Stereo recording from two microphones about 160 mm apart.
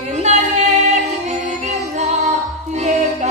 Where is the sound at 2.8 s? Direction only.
45° right (ahead or behind).